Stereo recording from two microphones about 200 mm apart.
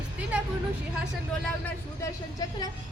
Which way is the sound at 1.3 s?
5° left (ahead or behind).